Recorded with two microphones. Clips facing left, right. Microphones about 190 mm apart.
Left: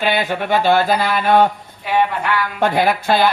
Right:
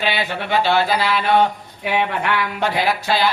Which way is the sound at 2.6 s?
50° left (ahead or behind).